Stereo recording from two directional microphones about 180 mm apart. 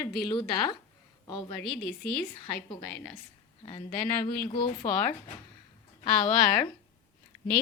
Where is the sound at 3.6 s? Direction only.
30° left (ahead or behind).